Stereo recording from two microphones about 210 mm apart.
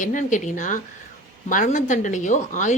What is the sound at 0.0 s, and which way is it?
Speech, 40° left (ahead or behind).